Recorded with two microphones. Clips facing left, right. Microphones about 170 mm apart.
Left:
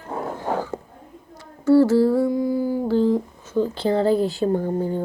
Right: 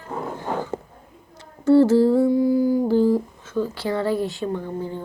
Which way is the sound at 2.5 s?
40° right (ahead or behind).